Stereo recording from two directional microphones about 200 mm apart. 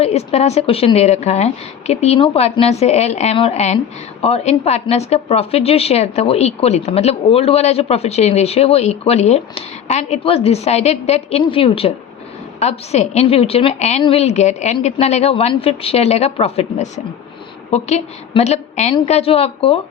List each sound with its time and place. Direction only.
0.0 s a woman's voice: 30° left (ahead or behind)